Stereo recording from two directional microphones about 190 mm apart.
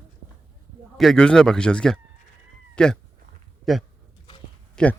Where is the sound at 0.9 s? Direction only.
5° left (ahead or behind).